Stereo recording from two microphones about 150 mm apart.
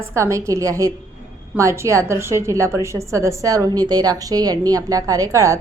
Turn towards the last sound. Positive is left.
turn(degrees=-20)  # may be behind; listen again after turning